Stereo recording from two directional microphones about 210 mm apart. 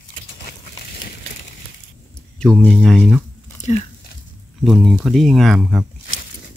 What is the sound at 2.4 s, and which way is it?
Speech, 5° left (ahead or behind).